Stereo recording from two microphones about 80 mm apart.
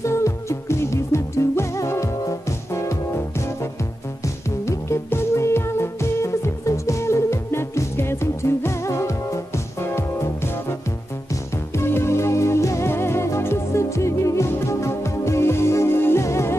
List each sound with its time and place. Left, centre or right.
0.0 s music: left
4.6 s music: left